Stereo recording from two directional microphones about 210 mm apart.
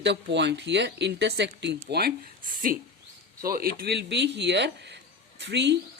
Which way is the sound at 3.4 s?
45° right (ahead or behind).